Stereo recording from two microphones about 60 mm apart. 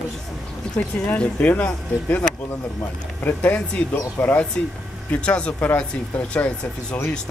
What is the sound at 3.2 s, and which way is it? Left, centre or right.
Speech, left.